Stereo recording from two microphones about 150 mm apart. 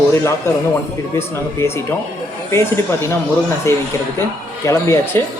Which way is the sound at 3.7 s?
20° left (ahead or behind).